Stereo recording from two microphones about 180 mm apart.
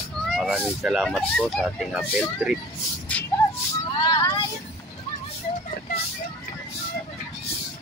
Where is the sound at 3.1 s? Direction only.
5° left (ahead or behind).